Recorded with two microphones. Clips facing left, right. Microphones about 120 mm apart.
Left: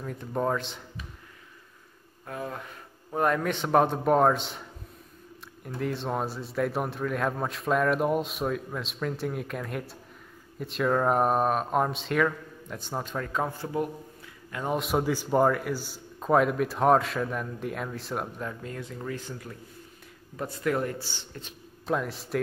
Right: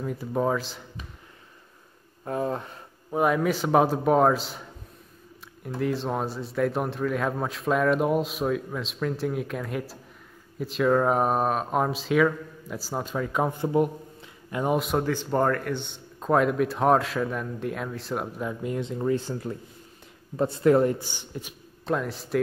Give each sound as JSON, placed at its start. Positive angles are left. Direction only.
{"t": 0.0, "sound": "a man's voice", "side_deg": -5}
{"t": 2.2, "sound": "speech", "side_deg": -30}
{"t": 3.1, "sound": "a man's voice", "side_deg": -5}
{"t": 14.7, "sound": "a man's voice", "side_deg": 0}
{"t": 21.0, "sound": "speech", "side_deg": -15}
{"t": 21.8, "sound": "a man's voice", "side_deg": 0}